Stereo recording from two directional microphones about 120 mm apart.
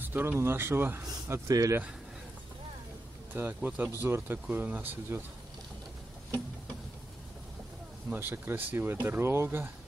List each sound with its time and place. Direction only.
0.1 s speech: 15° right (ahead or behind)
1.2 s speech: 30° right (ahead or behind)
3.3 s speech: 15° right (ahead or behind)
8.1 s speech: 15° right (ahead or behind)